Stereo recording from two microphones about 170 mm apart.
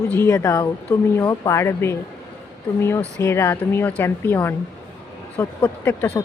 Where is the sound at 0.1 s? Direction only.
15° left (ahead or behind).